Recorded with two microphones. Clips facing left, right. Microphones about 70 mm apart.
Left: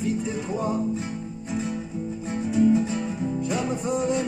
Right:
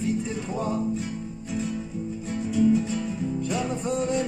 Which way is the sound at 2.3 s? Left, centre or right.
Left.